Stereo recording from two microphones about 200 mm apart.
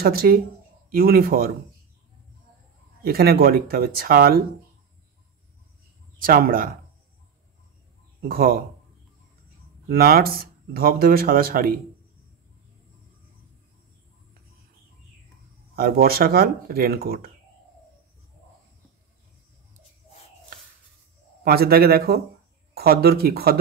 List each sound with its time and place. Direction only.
0.0 s speech: 50° right (ahead or behind)
3.0 s speech: 50° right (ahead or behind)
6.1 s speech: 45° right (ahead or behind)
8.2 s speech: 45° right (ahead or behind)
9.8 s speech: 50° right (ahead or behind)
15.7 s speech: 50° right (ahead or behind)
21.5 s speech: 50° right (ahead or behind)